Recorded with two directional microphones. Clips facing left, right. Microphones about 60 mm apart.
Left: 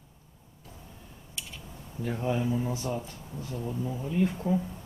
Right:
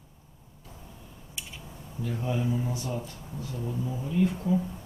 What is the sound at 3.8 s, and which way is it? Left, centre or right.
Speech, centre.